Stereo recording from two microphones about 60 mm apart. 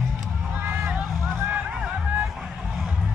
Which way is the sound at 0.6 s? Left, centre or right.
Right.